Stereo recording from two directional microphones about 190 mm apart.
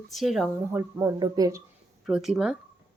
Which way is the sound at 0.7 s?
15° right (ahead or behind).